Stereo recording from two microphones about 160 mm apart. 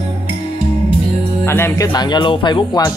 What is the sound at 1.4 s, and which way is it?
Speech, 15° left (ahead or behind).